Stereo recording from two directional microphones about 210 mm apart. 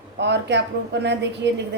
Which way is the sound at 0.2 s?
55° right (ahead or behind).